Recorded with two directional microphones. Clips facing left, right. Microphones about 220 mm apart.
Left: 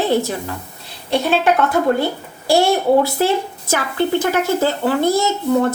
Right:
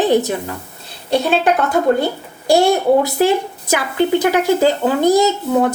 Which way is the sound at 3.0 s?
15° right (ahead or behind).